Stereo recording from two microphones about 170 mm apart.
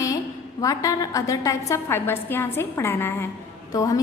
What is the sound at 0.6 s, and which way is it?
A woman's voice, 20° left (ahead or behind).